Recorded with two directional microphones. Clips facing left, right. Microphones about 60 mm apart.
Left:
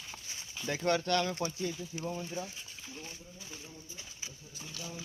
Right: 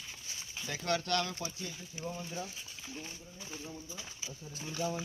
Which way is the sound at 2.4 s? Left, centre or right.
Centre.